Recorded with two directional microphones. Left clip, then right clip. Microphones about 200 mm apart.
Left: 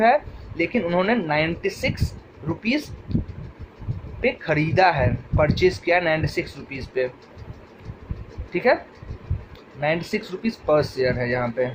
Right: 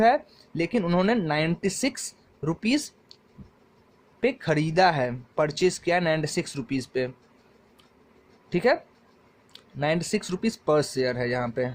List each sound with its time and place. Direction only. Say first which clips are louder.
0.0 s speech: left 3 dB; 40° right (ahead or behind)
4.2 s speech: left 3 dB; 40° right (ahead or behind)
8.5 s speech: left 3 dB; 40° right (ahead or behind)
9.8 s speech: left 2 dB; 40° right (ahead or behind)